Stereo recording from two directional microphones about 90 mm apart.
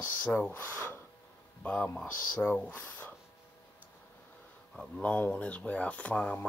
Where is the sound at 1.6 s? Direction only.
15° left (ahead or behind).